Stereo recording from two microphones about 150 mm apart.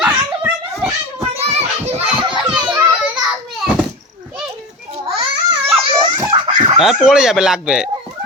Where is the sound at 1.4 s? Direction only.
45° right (ahead or behind).